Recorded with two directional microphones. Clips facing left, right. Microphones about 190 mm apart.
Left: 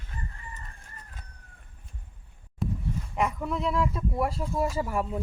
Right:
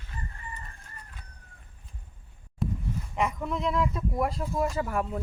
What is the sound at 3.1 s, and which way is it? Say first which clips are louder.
Speech: left 1 dB; 5° left (ahead or behind).